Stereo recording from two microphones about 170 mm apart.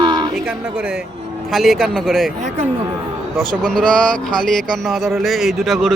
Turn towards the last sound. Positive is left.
turn(degrees=0)  # may be behind; listen again after turning